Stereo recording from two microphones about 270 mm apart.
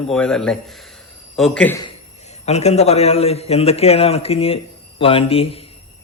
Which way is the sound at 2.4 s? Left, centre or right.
Left.